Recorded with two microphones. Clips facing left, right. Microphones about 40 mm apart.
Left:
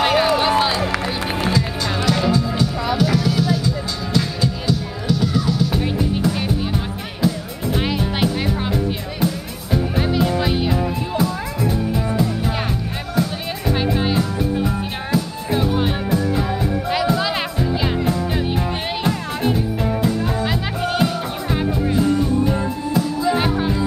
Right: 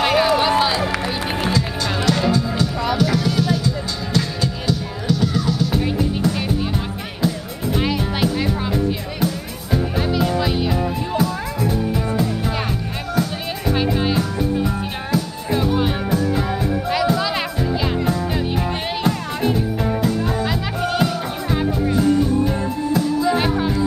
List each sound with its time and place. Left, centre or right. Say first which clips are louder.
0.0 s music: even; centre
9.9 s music: left 1 dB; centre
17.9 s music: even; centre
20.4 s music: even; centre
21.5 s music: right 1 dB; centre